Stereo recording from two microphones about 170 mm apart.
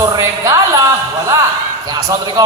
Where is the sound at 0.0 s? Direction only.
20° right (ahead or behind).